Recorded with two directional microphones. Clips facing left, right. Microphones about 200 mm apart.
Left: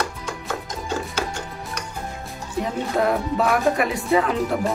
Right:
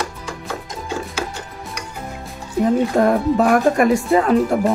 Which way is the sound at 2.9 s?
45° right (ahead or behind).